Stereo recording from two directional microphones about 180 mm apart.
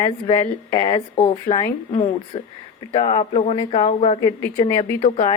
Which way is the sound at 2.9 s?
35° left (ahead or behind).